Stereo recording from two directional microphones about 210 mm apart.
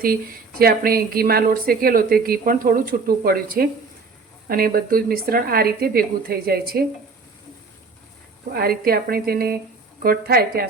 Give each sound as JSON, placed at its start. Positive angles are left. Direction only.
{"t": 0.6, "sound": "a woman's voice", "side_deg": -45}
{"t": 8.5, "sound": "a woman's voice", "side_deg": -45}